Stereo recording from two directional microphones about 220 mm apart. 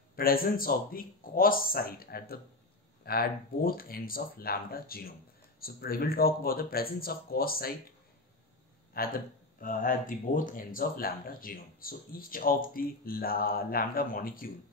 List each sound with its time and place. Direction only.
0.1 s speech: 40° left (ahead or behind)
8.9 s speech: 40° left (ahead or behind)